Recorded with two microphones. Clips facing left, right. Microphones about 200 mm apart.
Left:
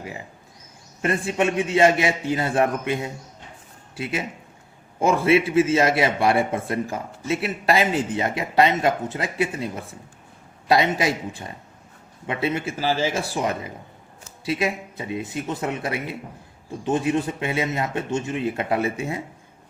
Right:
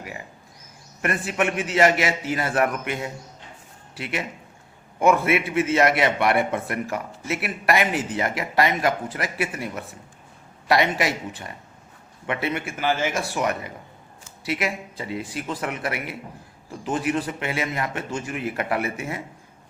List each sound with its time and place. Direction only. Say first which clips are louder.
1.0 s a man's voice: left 2 dB; 25° left (ahead or behind)